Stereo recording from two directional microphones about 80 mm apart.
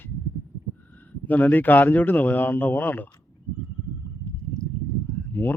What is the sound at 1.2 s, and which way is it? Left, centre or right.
Speech, left.